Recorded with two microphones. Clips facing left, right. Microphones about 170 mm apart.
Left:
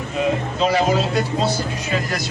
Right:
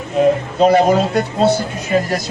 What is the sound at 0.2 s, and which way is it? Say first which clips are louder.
Speech: right 7 dB; 50° right (ahead or behind).